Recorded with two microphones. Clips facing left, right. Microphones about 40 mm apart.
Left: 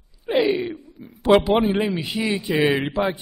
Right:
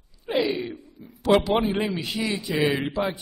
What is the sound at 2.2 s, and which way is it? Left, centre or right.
Speech, left.